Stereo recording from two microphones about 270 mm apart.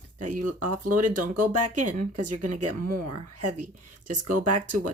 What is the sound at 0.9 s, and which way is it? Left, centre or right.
Speech, right.